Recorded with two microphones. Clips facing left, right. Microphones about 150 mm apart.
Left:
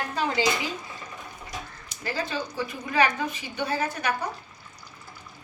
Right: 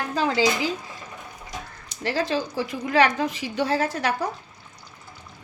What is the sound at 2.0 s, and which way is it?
A woman's voice, 90° right.